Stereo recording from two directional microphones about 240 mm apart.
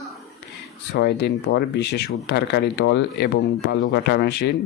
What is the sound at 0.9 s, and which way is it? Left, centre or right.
Speech, left.